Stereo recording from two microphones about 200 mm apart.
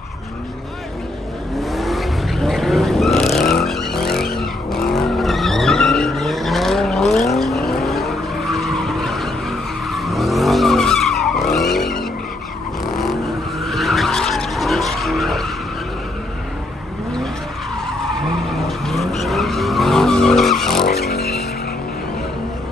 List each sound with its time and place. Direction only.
1.6 s vehicle: centre (ahead or behind)
18.7 s vehicle: centre (ahead or behind)